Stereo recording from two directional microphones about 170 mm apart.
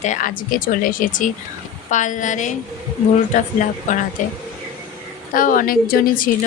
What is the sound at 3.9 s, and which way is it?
Speech, 45° left (ahead or behind).